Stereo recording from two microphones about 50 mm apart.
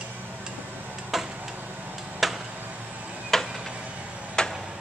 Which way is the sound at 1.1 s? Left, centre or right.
Centre.